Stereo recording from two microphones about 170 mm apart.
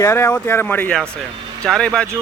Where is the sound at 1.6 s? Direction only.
5° left (ahead or behind).